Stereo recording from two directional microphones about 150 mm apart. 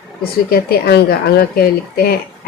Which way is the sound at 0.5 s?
90° left.